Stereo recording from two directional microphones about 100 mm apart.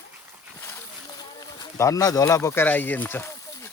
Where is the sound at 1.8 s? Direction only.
35° left (ahead or behind).